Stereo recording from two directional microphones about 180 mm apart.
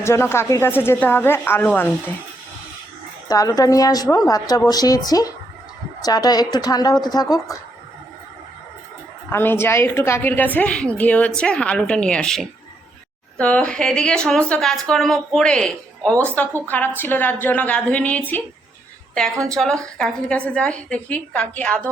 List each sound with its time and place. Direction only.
0.0 s a woman's voice: 15° left (ahead or behind)
3.2 s a woman's voice: 20° left (ahead or behind)
9.3 s a woman's voice: 10° left (ahead or behind)
19.5 s a woman's voice: 5° left (ahead or behind)